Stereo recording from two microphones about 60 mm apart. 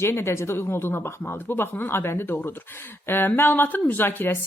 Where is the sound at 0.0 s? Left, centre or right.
Left.